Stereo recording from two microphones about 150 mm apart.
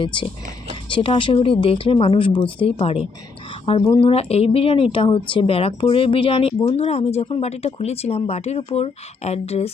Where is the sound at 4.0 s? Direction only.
40° left (ahead or behind).